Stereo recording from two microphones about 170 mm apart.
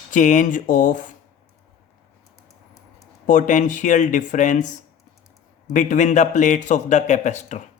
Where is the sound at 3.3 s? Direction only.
50° left (ahead or behind).